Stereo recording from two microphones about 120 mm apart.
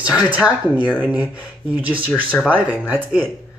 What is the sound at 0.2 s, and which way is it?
Speech, 10° right (ahead or behind).